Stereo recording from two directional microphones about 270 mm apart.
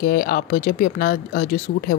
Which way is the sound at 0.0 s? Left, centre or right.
Left.